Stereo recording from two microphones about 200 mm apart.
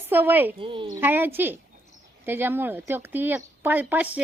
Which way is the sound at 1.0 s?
10° right (ahead or behind).